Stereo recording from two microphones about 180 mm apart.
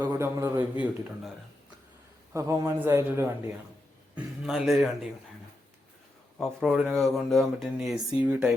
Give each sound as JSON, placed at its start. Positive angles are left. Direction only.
{"t": 0.0, "sound": "a man's voice", "side_deg": -15}
{"t": 2.3, "sound": "a man's voice", "side_deg": -15}
{"t": 4.1, "sound": "speech", "side_deg": 0}
{"t": 6.4, "sound": "speech", "side_deg": 0}